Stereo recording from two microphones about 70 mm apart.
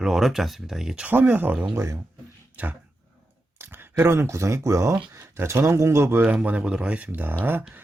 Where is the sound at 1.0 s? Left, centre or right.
Right.